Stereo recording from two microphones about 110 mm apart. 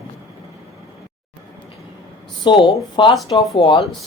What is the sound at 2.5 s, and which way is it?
Speech, 45° left (ahead or behind).